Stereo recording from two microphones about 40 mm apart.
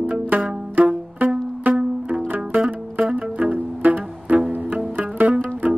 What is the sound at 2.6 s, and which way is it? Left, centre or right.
Music, right.